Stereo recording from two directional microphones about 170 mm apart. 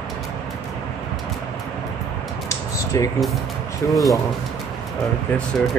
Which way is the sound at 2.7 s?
20° left (ahead or behind).